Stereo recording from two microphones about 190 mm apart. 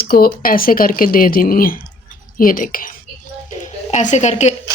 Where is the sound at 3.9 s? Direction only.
40° left (ahead or behind).